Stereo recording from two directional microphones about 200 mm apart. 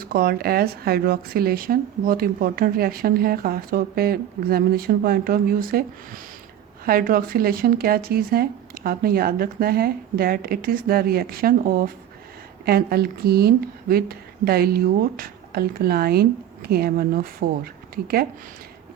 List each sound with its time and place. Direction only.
0.0 s speech: 45° right (ahead or behind)
6.8 s speech: 45° right (ahead or behind)